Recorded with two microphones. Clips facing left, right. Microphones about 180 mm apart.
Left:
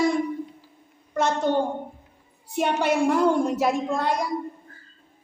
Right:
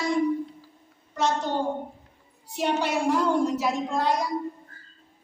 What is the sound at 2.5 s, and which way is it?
A woman's voice, 55° left (ahead or behind).